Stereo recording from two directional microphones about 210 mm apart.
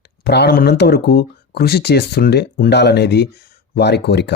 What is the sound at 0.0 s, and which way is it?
Speech, 50° left (ahead or behind).